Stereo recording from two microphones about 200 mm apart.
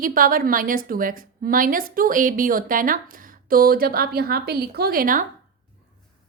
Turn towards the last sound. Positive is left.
turn(degrees=-45)  # may be behind; listen again after turning